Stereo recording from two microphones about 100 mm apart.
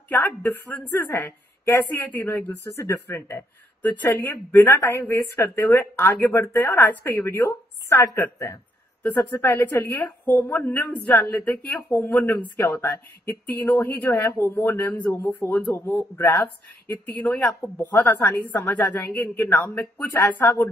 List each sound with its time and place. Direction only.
0.1 s a woman's voice: 20° left (ahead or behind)
2.6 s a woman's voice: 30° left (ahead or behind)